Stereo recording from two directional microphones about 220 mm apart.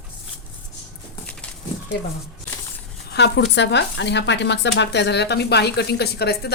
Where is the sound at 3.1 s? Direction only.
50° left (ahead or behind).